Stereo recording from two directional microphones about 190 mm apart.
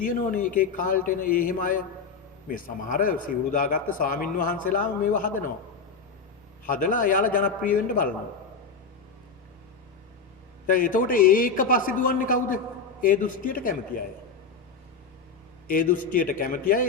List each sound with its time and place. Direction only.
0.0 s a man's voice: 45° left (ahead or behind)
6.7 s a man's voice: 45° left (ahead or behind)
10.7 s a man's voice: 45° left (ahead or behind)
15.6 s a man's voice: 45° left (ahead or behind)